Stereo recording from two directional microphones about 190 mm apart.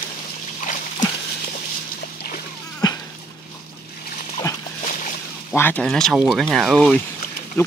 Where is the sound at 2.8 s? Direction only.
20° left (ahead or behind).